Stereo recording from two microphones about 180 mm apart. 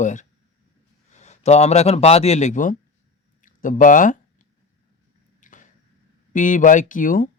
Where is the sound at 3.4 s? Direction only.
45° left (ahead or behind).